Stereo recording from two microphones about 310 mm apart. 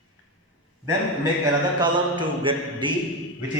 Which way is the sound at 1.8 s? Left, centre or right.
Centre.